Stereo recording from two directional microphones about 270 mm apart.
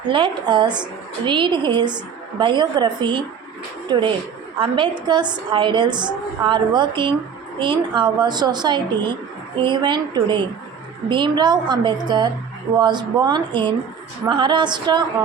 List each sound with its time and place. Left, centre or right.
0.1 s a woman's voice: centre